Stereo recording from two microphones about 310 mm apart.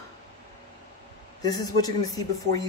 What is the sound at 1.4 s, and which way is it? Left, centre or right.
A man's voice, centre.